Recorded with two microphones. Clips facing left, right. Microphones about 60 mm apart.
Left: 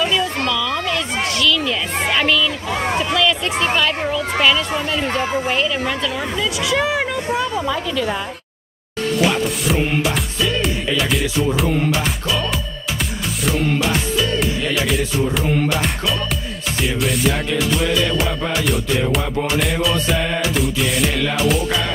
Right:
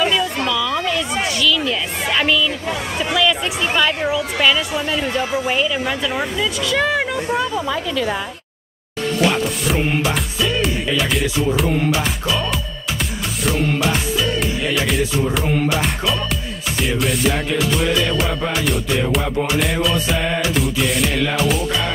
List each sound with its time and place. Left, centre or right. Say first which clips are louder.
0.0 s a sound: right 1 dB; centre
1.2 s a sound: left 1 dB; centre
2.7 s a sound: left 4 dB; left
3.2 s chatter: right 4 dB; centre
3.7 s a woman's voice: right 1 dB; centre
5.0 s speech: even; left
5.5 s a woman's voice: even; centre
9.7 s music: even; centre
14.1 s music: left 1 dB; centre